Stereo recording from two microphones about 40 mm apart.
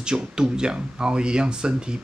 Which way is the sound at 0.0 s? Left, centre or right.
Centre.